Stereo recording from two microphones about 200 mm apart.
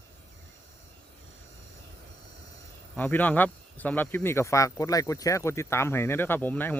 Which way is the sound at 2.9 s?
10° left (ahead or behind).